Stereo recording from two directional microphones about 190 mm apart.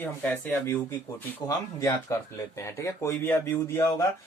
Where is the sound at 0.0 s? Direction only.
10° left (ahead or behind).